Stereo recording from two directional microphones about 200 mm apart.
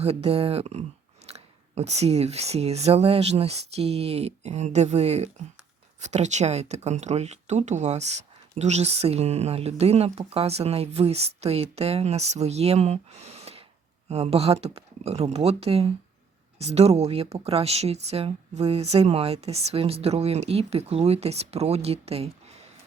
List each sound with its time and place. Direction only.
0.0 s speech: 30° right (ahead or behind)